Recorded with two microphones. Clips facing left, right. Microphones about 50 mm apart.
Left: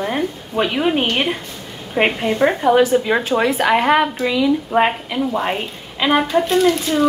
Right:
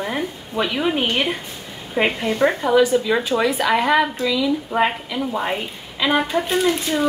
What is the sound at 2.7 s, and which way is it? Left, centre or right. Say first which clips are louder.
A woman's voice: left 2 dB; left.